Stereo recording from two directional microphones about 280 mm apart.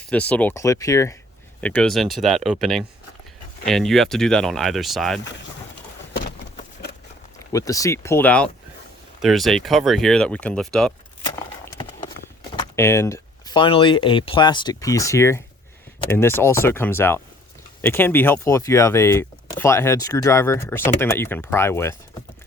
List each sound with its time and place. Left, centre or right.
0.1 s speech: centre
7.5 s speech: centre
12.5 s speech: centre